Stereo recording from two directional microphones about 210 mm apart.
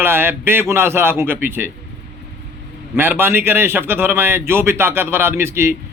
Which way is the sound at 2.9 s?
10° right (ahead or behind).